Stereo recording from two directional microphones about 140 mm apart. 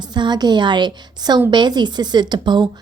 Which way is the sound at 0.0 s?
30° right (ahead or behind).